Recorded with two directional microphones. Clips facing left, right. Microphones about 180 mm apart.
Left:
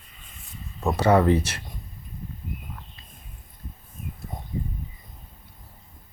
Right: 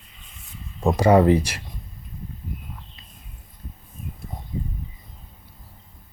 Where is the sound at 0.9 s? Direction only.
10° right (ahead or behind).